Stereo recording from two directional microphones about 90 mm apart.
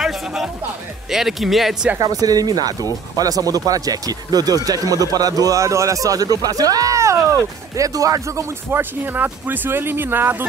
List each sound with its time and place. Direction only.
0.0 s music: 5° right (ahead or behind)
1.1 s speech: 5° right (ahead or behind)
2.0 s a man's voice: 45° right (ahead or behind); by 10.3 s 25° right (ahead or behind)